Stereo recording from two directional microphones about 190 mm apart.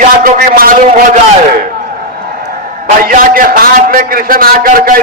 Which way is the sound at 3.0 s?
45° right (ahead or behind).